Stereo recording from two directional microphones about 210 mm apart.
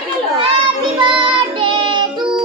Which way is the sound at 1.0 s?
25° right (ahead or behind).